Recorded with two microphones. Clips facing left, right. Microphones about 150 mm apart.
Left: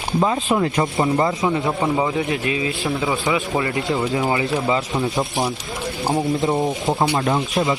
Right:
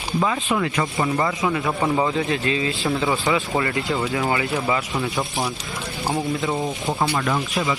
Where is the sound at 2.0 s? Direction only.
15° left (ahead or behind).